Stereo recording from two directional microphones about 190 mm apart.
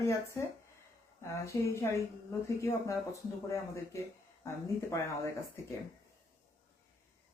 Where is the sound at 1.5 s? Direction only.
15° left (ahead or behind).